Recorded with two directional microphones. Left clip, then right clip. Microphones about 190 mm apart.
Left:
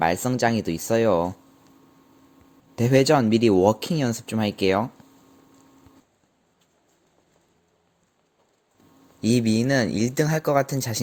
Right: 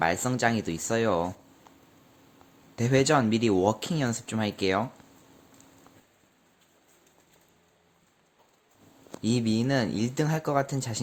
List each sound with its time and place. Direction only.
0.0 s speech: 20° left (ahead or behind)
2.7 s speech: 25° left (ahead or behind)
9.2 s speech: 25° left (ahead or behind)